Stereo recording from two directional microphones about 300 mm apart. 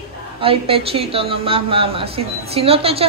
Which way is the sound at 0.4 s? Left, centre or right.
Centre.